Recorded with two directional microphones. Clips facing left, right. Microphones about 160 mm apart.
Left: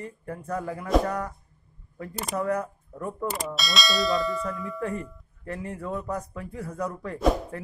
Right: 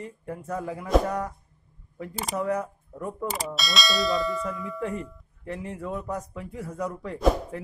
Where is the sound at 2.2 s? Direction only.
Centre (ahead or behind).